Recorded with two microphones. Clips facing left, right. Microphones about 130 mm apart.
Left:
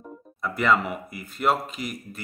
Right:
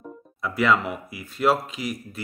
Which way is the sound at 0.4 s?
Centre (ahead or behind).